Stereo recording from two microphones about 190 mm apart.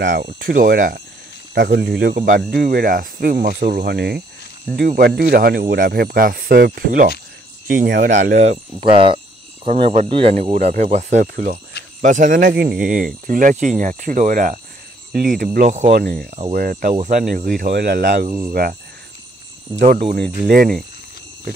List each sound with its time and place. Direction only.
0.0 s speech: 70° right (ahead or behind)
0.4 s speech: 50° right (ahead or behind)
1.5 s speech: 60° right (ahead or behind)
8.1 s speech: 40° right (ahead or behind)
11.3 s speech: 55° right (ahead or behind)
12.0 s speech: 40° right (ahead or behind)
15.9 s speech: 55° right (ahead or behind)
17.6 s speech: 60° right (ahead or behind)
19.8 s speech: 40° right (ahead or behind)